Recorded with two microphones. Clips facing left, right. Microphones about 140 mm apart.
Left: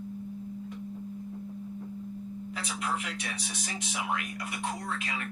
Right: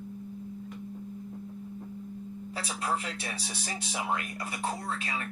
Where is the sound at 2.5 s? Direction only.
35° right (ahead or behind).